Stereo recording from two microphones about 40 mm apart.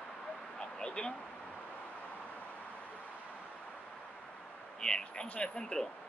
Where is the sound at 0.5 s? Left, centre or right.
Left.